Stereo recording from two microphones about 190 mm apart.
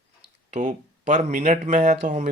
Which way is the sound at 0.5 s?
40° right (ahead or behind).